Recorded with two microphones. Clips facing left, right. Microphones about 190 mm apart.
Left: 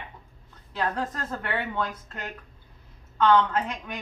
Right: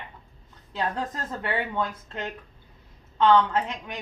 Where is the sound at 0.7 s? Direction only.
25° right (ahead or behind).